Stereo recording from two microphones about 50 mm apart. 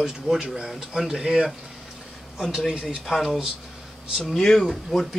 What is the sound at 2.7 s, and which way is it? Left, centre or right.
Speech, centre.